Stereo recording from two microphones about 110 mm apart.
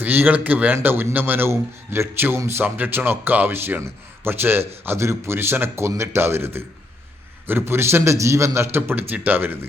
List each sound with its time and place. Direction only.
0.0 s a man's voice: 15° right (ahead or behind)